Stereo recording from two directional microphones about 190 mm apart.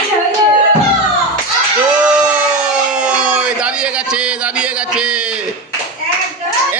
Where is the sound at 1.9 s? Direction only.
5° right (ahead or behind).